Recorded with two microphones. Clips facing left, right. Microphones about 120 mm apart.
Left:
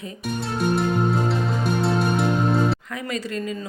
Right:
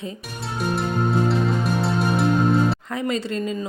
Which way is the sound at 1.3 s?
Centre (ahead or behind).